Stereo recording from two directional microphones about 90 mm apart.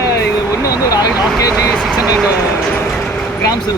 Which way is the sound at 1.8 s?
10° right (ahead or behind).